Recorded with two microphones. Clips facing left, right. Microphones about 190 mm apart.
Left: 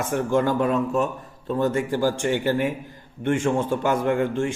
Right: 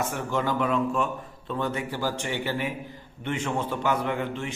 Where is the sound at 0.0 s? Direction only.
50° left (ahead or behind).